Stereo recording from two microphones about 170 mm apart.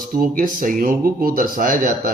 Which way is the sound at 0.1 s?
55° right (ahead or behind).